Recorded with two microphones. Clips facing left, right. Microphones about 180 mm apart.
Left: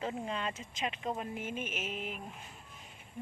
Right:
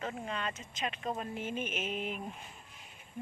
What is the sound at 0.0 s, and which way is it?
Speech, 25° left (ahead or behind).